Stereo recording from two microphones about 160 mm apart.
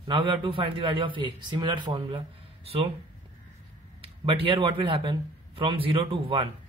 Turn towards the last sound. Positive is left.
turn(degrees=-35)  # may be behind; listen again after turning